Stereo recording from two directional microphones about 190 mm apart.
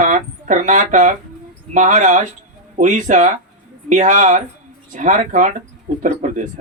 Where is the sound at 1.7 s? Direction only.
40° right (ahead or behind).